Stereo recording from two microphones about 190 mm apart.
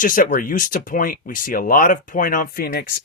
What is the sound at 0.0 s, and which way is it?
Speech, 45° left (ahead or behind).